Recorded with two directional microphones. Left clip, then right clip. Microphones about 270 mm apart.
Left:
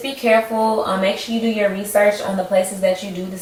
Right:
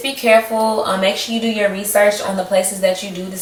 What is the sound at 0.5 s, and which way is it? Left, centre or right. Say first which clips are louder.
Speech: right 1 dB; centre.